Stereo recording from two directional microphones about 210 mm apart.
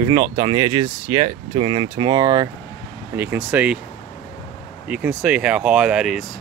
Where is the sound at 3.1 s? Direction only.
10° right (ahead or behind).